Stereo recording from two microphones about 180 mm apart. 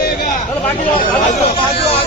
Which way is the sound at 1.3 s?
40° left (ahead or behind).